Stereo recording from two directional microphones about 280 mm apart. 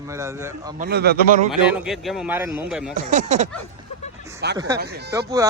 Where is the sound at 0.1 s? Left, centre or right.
Centre.